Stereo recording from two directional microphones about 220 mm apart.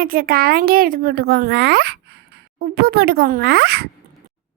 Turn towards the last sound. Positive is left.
turn(degrees=-45)  # may be behind; listen again after turning